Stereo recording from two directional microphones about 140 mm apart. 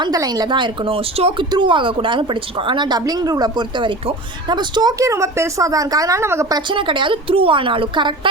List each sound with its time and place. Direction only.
0.0 s a woman's voice: 30° right (ahead or behind)
6.7 s a woman's voice: 35° right (ahead or behind)